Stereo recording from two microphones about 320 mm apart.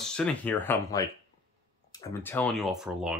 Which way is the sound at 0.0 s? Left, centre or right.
Centre.